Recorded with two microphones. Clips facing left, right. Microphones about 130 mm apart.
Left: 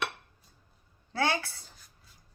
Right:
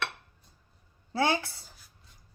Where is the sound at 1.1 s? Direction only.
20° right (ahead or behind).